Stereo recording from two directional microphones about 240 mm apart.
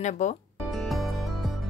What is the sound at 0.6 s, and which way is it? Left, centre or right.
Music, centre.